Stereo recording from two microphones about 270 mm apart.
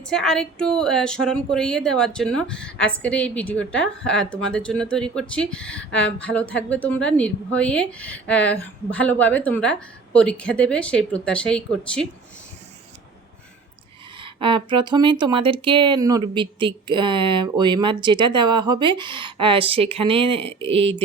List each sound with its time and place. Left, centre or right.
0.1 s a woman's voice: centre
14.2 s speech: centre